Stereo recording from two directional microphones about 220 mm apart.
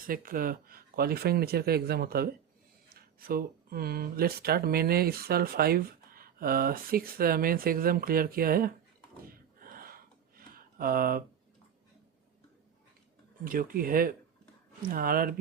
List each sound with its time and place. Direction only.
0.1 s speech: 40° right (ahead or behind)
9.6 s gasp: 40° right (ahead or behind)
10.5 s a sound: 40° right (ahead or behind)
13.4 s speech: 40° right (ahead or behind)